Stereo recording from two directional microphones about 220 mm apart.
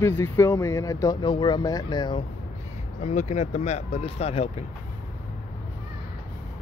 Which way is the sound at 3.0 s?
35° left (ahead or behind).